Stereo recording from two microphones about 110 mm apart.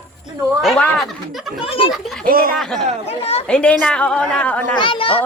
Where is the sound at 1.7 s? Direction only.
55° left (ahead or behind).